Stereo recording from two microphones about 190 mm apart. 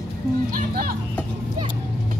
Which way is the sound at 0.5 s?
50° right (ahead or behind).